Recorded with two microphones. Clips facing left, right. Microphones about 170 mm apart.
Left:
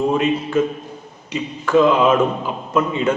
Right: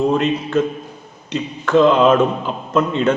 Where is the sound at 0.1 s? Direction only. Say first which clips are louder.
Right 1 dB; 5° left (ahead or behind).